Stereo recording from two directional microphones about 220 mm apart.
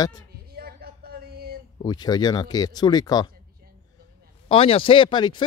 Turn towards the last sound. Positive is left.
turn(degrees=20)  # may be behind; listen again after turning